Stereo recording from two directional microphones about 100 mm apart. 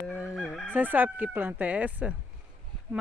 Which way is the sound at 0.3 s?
5° right (ahead or behind).